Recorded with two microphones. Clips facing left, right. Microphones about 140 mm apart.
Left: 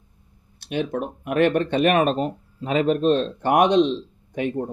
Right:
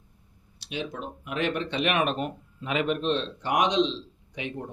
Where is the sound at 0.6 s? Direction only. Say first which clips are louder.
Left 8 dB; 55° left (ahead or behind).